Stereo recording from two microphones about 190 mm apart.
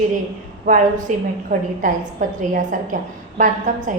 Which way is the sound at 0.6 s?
45° right (ahead or behind).